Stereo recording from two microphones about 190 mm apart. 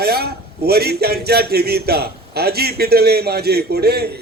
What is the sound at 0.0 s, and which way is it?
A man's voice, 55° right (ahead or behind).